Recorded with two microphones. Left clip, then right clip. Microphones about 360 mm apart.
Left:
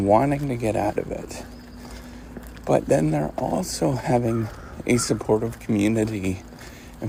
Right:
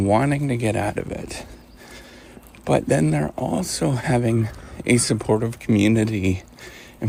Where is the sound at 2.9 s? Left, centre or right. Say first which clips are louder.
Even; right.